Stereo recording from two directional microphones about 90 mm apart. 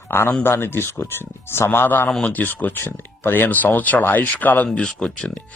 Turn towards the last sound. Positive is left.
turn(degrees=10)  # may be behind; listen again after turning